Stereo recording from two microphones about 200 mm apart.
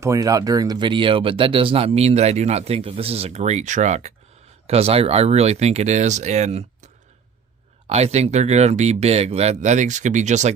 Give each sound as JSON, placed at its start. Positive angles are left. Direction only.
{"t": 0.0, "sound": "speech", "side_deg": -15}